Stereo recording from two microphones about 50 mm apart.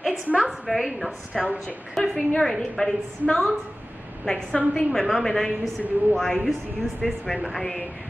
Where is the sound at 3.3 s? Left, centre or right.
Centre.